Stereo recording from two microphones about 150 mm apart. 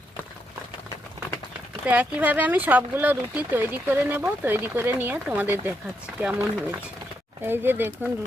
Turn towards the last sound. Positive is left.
turn(degrees=-15)  # may be behind; listen again after turning